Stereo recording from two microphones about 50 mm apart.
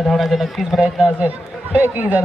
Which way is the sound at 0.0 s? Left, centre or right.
Centre.